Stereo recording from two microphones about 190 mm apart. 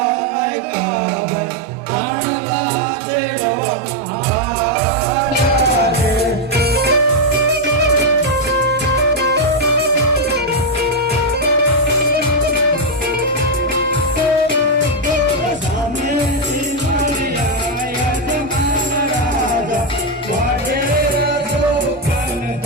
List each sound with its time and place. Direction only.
6.6 s music: 55° right (ahead or behind)